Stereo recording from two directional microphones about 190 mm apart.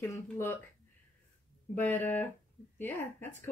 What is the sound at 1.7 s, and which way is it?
Speech, 10° left (ahead or behind).